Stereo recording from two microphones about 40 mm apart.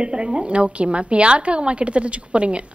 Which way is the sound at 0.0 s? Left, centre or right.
Right.